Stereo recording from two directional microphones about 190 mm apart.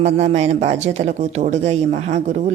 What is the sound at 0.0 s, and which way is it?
Speech, 35° right (ahead or behind).